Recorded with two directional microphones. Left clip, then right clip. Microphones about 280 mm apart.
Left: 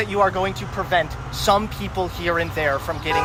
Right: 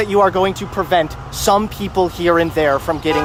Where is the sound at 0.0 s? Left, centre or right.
Right.